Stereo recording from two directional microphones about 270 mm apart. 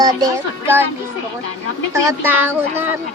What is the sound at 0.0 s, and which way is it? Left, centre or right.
Speech, centre.